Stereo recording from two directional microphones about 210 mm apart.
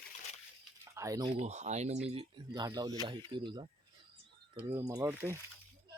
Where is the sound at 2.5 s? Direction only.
20° right (ahead or behind).